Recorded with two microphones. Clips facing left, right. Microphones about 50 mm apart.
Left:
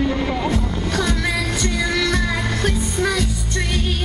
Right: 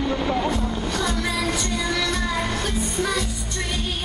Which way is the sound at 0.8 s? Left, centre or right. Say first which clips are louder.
Left 5 dB; left.